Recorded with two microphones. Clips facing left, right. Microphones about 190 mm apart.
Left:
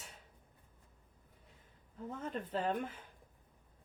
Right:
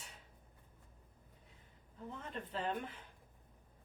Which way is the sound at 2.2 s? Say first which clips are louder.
Left 4 dB; 40° left (ahead or behind).